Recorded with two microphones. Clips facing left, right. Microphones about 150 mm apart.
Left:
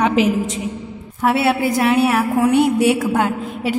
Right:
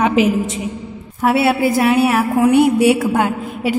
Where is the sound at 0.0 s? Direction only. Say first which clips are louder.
Right 2 dB; 5° right (ahead or behind).